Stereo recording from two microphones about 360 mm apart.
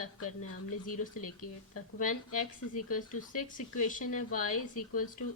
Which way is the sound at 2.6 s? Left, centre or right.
Left.